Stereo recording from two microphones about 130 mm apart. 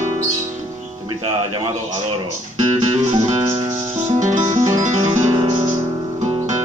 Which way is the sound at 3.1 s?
25° right (ahead or behind).